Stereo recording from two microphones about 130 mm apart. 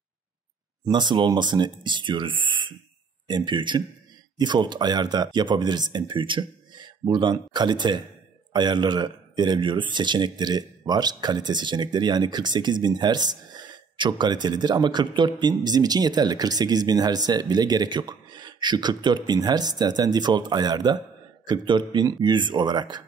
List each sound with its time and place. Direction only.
0.8 s speech: 35° right (ahead or behind)